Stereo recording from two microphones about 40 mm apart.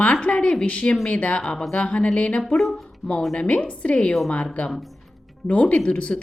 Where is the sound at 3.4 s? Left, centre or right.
Left.